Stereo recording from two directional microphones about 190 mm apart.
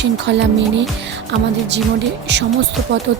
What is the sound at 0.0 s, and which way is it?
Speech, 70° right (ahead or behind).